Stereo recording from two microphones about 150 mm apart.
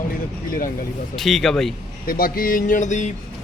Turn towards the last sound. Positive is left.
turn(degrees=55)  # may be behind; listen again after turning